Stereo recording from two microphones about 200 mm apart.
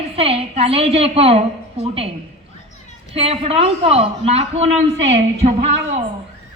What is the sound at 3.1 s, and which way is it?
A woman's voice, 30° right (ahead or behind).